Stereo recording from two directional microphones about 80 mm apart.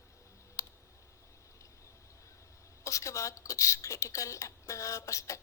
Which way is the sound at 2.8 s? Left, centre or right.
Left.